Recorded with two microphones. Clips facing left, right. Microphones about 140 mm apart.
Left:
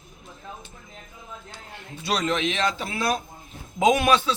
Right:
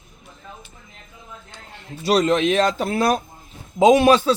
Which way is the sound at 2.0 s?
35° right (ahead or behind).